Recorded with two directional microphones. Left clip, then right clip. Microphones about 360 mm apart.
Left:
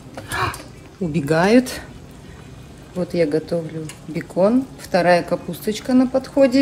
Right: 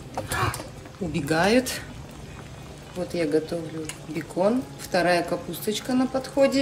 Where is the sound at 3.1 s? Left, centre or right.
Centre.